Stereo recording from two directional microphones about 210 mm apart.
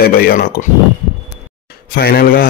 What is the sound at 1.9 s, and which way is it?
Speech, 45° left (ahead or behind).